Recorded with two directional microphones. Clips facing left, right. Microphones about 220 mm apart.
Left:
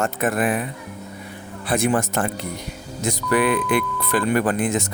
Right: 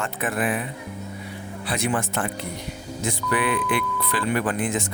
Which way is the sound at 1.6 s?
50° left (ahead or behind).